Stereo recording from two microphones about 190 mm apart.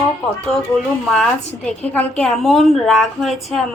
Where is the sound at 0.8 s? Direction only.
Centre (ahead or behind).